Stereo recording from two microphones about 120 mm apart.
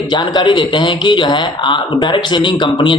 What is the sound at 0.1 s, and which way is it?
A man's voice, 40° left (ahead or behind).